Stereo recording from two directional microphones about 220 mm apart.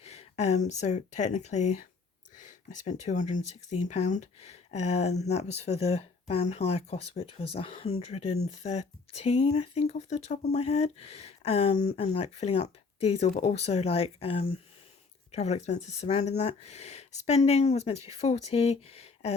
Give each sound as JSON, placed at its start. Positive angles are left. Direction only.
{"t": 0.0, "sound": "speech", "side_deg": 30}